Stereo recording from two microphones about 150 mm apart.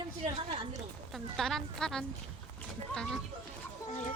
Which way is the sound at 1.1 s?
Centre (ahead or behind).